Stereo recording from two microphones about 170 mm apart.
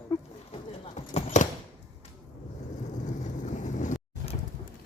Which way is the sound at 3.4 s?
45° left (ahead or behind).